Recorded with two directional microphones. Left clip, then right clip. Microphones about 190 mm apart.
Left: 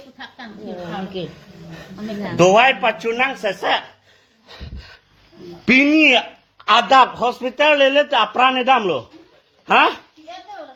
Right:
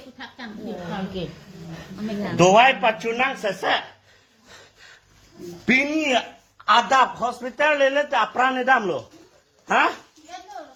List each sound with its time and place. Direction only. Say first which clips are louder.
0.8 s a woman's voice: left 4 dB; 25° left (ahead or behind)
2.6 s a woman's voice: left 2 dB; 10° left (ahead or behind); by 3.8 s 35° left (ahead or behind)
5.6 s a man's voice: left 8 dB; 40° left (ahead or behind)